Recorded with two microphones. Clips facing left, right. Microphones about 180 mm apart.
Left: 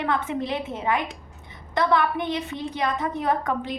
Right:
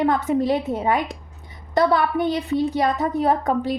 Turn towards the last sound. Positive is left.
turn(degrees=-40)  # may be behind; listen again after turning